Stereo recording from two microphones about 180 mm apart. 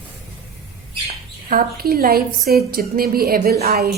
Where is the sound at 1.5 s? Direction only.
55° right (ahead or behind).